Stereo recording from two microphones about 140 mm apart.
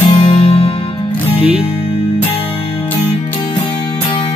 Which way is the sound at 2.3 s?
40° left (ahead or behind).